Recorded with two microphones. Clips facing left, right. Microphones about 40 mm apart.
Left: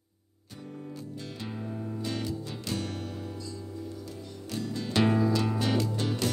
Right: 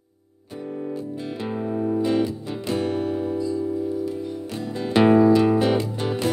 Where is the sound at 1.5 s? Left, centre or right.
Right.